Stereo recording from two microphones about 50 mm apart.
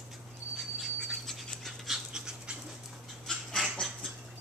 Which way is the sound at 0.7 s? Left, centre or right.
Centre.